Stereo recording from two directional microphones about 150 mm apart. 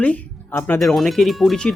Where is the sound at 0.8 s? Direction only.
Centre (ahead or behind).